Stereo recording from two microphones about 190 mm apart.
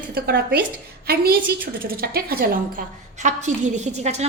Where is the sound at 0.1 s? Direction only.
55° right (ahead or behind).